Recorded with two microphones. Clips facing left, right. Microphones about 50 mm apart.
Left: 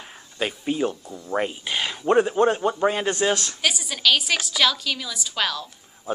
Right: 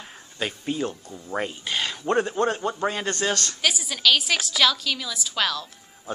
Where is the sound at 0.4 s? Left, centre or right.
Centre.